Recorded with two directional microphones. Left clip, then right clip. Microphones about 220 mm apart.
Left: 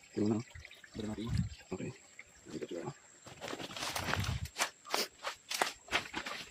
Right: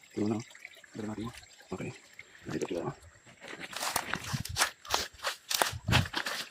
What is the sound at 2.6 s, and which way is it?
Speech, 35° right (ahead or behind).